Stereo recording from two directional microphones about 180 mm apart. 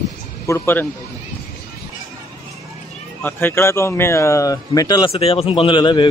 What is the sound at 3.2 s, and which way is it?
Speech, 15° left (ahead or behind).